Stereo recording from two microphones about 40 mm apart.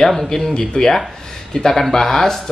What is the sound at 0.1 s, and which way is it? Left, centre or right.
Speech, centre.